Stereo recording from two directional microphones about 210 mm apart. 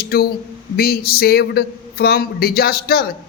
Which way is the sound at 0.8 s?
45° left (ahead or behind).